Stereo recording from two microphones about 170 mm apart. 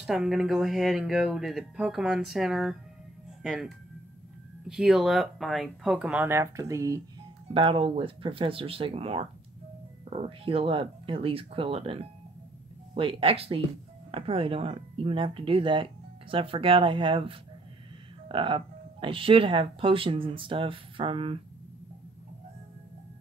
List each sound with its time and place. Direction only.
0.0 s speech: centre (ahead or behind); by 7.0 s 20° right (ahead or behind)
7.5 s speech: 30° right (ahead or behind)